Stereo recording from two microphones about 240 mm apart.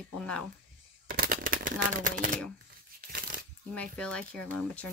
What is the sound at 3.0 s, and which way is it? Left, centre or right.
Tearing, right.